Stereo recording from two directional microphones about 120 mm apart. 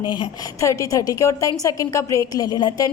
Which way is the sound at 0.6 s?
25° left (ahead or behind).